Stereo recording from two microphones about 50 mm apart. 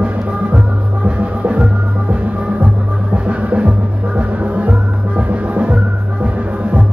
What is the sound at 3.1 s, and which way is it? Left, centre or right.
Music, right.